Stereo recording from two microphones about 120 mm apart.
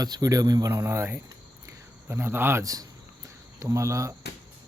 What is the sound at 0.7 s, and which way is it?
Speech, 20° right (ahead or behind).